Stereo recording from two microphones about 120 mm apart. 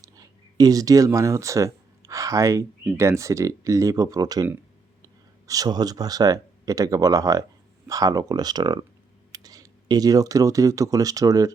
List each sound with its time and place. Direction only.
0.0 s speech: 30° right (ahead or behind)
5.5 s speech: 35° right (ahead or behind)